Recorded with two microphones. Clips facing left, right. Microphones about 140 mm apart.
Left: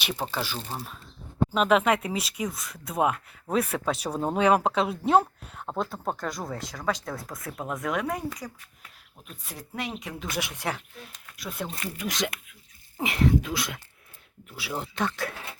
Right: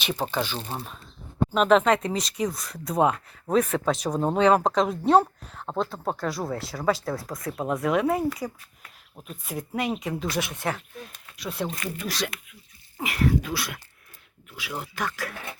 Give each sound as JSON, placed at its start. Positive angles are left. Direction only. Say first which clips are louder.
{"t": 0.1, "sound": "speech", "louder": "right 4 dB", "side_deg": -15}
{"t": 0.7, "sound": "speech", "louder": "right 2 dB", "side_deg": 0}
{"t": 4.1, "sound": "speech", "louder": "right 3 dB", "side_deg": -5}
{"t": 4.4, "sound": "speech", "louder": "right 2 dB", "side_deg": 10}
{"t": 9.5, "sound": "speech", "louder": "right 7 dB", "side_deg": -5}
{"t": 11.3, "sound": "speech", "louder": "right 4 dB", "side_deg": 0}
{"t": 11.7, "sound": "speech", "louder": "right 1 dB", "side_deg": 20}
{"t": 14.5, "sound": "speech", "louder": "left 1 dB", "side_deg": 30}